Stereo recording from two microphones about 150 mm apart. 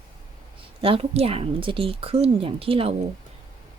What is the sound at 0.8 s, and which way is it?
A woman's voice, 40° right (ahead or behind).